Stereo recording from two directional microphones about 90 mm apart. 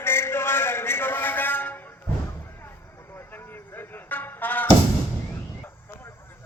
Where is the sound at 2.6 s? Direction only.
25° left (ahead or behind).